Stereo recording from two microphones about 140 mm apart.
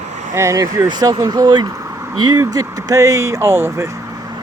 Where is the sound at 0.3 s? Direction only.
20° right (ahead or behind).